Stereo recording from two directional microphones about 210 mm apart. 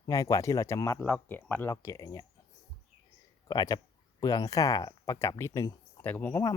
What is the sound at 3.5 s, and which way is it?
Speech, 20° left (ahead or behind).